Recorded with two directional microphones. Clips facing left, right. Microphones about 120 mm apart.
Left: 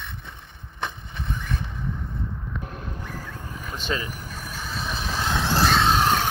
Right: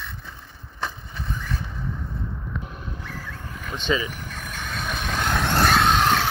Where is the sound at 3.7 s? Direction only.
5° left (ahead or behind).